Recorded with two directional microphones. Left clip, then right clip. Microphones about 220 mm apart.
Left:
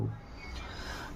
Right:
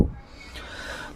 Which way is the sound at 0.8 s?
45° right (ahead or behind).